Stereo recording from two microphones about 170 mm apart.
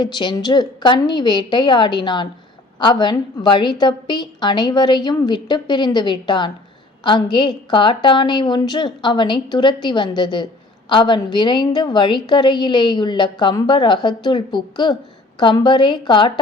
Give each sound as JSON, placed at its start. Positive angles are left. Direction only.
{"t": 0.0, "sound": "a woman's voice", "side_deg": 25}